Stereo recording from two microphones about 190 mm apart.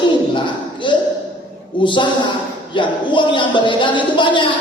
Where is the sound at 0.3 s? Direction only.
25° left (ahead or behind).